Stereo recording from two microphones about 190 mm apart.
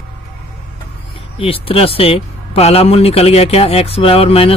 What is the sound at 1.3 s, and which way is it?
Speech, 30° left (ahead or behind).